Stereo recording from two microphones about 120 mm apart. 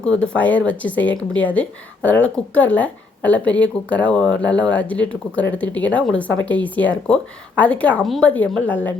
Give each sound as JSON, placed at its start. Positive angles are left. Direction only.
{"t": 0.0, "sound": "speech", "side_deg": 10}
{"t": 8.0, "sound": "speech", "side_deg": 0}
{"t": 8.6, "sound": "speech", "side_deg": 15}